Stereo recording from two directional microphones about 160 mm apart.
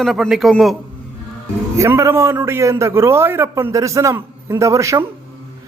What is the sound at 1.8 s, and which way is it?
A man's voice, 15° right (ahead or behind).